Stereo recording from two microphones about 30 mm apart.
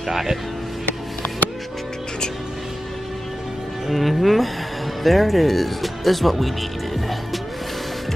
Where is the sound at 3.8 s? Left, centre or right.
Centre.